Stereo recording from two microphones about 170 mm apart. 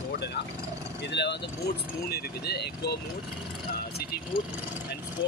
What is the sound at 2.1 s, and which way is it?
Speech, 75° left (ahead or behind).